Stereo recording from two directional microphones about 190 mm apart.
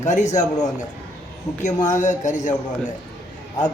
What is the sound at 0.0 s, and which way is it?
Speech, 40° left (ahead or behind).